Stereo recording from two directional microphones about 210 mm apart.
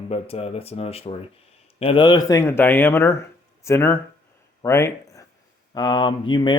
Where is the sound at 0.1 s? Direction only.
30° left (ahead or behind).